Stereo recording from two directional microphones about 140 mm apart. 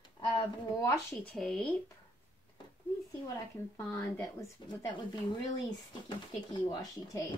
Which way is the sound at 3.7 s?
20° left (ahead or behind).